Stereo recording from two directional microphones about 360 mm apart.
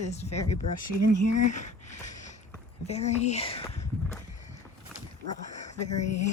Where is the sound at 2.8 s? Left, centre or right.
Centre.